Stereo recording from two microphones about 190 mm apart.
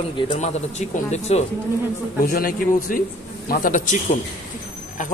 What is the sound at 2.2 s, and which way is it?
A man's voice, 50° left (ahead or behind).